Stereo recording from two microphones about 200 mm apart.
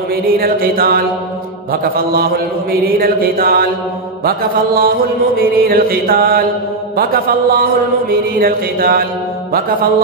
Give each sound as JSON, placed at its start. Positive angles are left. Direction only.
{"t": 0.1, "sound": "mantra", "side_deg": -50}